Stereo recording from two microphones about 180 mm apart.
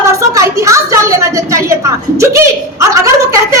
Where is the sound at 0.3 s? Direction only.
15° right (ahead or behind).